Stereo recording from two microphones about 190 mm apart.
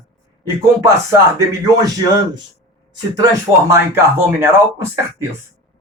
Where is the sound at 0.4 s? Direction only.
15° right (ahead or behind).